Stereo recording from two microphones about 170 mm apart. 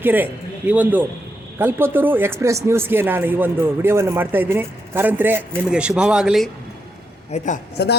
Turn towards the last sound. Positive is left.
turn(degrees=75)  # may be behind; listen again after turning